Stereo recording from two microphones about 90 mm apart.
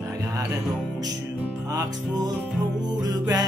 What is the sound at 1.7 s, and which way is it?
Music, 45° right (ahead or behind).